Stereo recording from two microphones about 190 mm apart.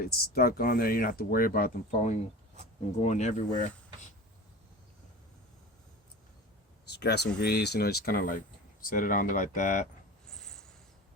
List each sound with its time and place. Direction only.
0.0 s speech: 55° left (ahead or behind); by 3.7 s 40° left (ahead or behind)
6.8 s speech: 60° left (ahead or behind); by 9.8 s 45° left (ahead or behind)
10.3 s a sound: 5° left (ahead or behind)